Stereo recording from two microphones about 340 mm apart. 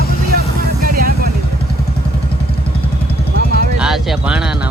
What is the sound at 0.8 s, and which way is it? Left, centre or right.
Music, right.